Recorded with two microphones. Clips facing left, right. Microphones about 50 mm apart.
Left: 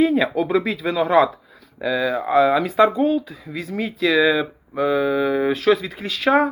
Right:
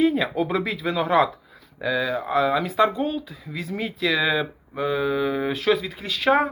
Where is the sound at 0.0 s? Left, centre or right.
Centre.